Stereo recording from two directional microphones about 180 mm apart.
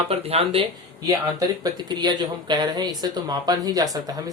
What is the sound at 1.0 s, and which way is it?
A man's voice, 20° right (ahead or behind).